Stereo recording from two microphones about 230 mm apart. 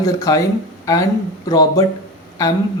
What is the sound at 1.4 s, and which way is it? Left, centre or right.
Speech, centre.